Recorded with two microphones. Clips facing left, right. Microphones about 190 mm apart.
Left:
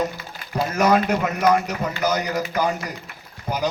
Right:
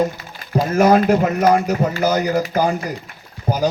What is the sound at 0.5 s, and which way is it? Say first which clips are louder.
A man's voice: right 5 dB; 35° right (ahead or behind).